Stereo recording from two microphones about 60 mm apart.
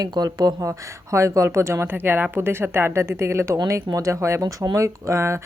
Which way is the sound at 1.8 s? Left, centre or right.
Right.